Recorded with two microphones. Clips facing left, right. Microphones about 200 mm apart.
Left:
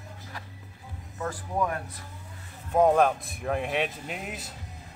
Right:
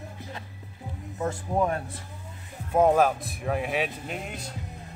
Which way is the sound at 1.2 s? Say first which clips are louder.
Right 3 dB; 25° right (ahead or behind).